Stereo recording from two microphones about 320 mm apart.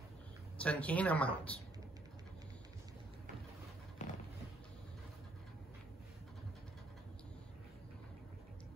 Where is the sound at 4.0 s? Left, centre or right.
Left.